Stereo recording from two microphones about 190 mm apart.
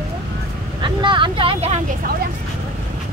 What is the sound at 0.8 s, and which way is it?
Speech, 25° right (ahead or behind).